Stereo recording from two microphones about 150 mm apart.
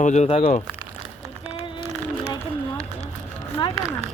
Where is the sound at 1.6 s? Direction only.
35° left (ahead or behind).